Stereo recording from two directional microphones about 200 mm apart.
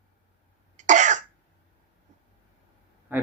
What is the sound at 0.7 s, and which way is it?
Cough, 35° right (ahead or behind).